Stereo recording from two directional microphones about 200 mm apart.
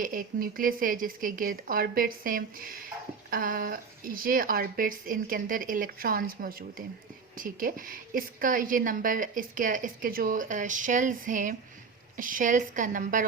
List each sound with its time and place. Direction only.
0.0 s a woman's voice: 45° right (ahead or behind)